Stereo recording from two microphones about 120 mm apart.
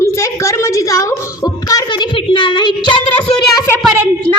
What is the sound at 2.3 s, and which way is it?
Speech, 40° left (ahead or behind).